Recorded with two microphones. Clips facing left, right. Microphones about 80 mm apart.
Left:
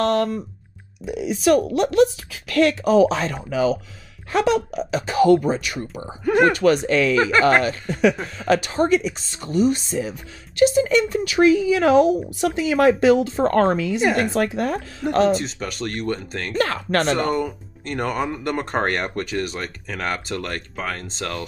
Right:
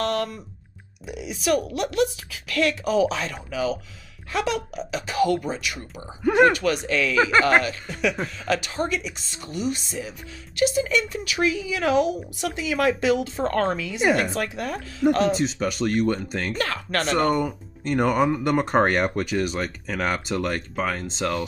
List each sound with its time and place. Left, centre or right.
0.0 s a sound: left
1.0 s speech: left
6.2 s speech: centre
6.5 s speech: left
7.2 s speech: centre
7.6 s speech: left
15.0 s speech: centre
16.5 s speech: left
17.3 s speech: centre